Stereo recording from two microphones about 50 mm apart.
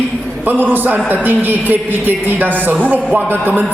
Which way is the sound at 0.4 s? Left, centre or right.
Right.